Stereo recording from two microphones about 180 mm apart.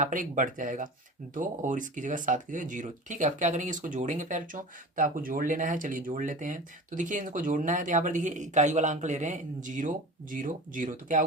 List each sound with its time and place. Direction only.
0.0 s speech: 45° right (ahead or behind)